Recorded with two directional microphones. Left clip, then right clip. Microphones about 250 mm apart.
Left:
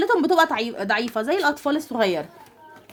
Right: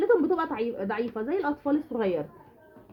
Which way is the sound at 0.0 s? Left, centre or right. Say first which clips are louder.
Left 6 dB; left.